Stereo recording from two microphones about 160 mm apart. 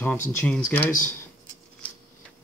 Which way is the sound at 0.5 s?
15° left (ahead or behind).